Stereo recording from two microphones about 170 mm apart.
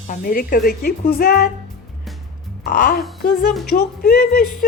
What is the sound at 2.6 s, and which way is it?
Speech, 55° left (ahead or behind).